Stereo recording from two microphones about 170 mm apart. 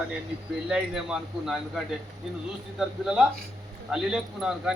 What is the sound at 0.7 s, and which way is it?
Speech, 5° right (ahead or behind).